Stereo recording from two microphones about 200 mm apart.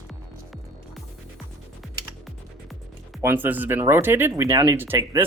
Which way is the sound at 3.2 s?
10° right (ahead or behind).